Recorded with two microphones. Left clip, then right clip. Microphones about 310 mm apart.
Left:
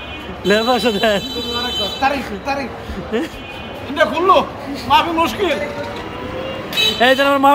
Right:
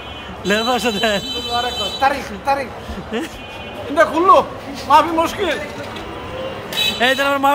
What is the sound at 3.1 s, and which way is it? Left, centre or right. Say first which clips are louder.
Speech: left 3 dB; centre.